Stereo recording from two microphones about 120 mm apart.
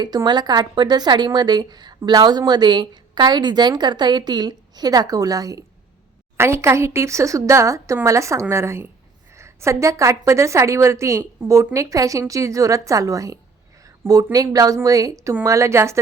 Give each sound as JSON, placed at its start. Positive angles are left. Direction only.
{"t": 0.0, "sound": "a woman's voice", "side_deg": -35}